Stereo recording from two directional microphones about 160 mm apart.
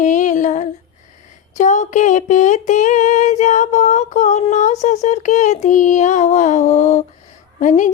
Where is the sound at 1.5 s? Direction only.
50° left (ahead or behind).